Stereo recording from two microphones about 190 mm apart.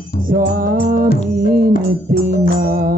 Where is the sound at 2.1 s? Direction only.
55° right (ahead or behind).